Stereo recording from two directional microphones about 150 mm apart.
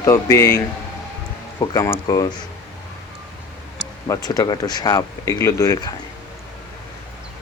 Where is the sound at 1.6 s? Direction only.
20° left (ahead or behind).